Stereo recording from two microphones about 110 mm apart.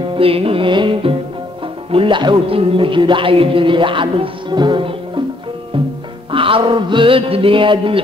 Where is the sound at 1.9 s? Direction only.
55° right (ahead or behind).